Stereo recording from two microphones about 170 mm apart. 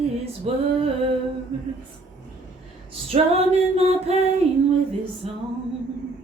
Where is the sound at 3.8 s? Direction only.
40° right (ahead or behind).